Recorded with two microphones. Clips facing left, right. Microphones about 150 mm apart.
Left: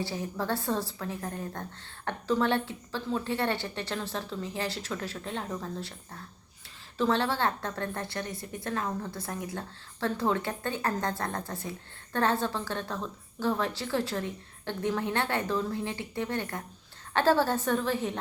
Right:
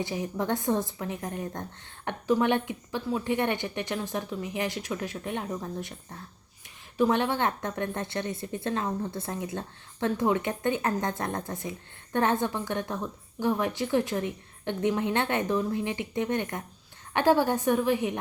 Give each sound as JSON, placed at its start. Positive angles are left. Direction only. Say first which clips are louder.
{"t": 0.0, "sound": "a woman's voice", "louder": "right 3 dB", "side_deg": -20}
{"t": 6.9, "sound": "a woman's voice", "louder": "right 3 dB", "side_deg": -15}